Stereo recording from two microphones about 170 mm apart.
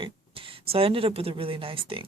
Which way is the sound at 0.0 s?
30° right (ahead or behind).